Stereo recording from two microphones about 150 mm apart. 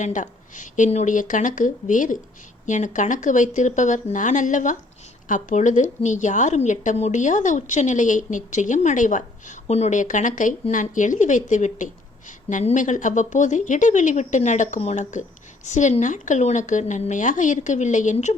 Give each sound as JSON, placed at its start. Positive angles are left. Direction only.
{"t": 0.0, "sound": "a woman's voice", "side_deg": 55}